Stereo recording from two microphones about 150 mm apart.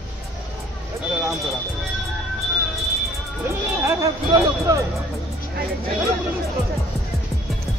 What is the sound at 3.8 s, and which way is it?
Speech, 20° right (ahead or behind).